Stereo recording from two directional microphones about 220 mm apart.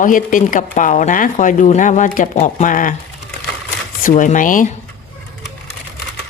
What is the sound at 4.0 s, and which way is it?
Speech, 35° left (ahead or behind).